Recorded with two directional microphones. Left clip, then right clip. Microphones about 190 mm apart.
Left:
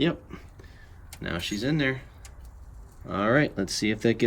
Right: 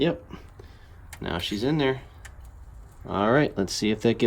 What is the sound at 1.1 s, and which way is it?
Speech, 10° right (ahead or behind).